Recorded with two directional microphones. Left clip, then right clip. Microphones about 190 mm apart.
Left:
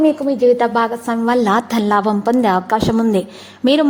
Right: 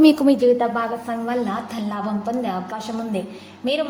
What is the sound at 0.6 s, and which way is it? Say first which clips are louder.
A woman's voice: left 6 dB; 35° left (ahead or behind).